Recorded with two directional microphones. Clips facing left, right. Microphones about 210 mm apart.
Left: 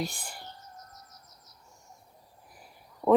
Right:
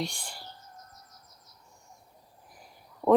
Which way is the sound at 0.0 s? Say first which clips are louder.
Even; 5° left (ahead or behind).